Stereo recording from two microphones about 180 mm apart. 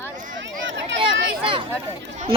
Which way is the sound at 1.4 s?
30° right (ahead or behind).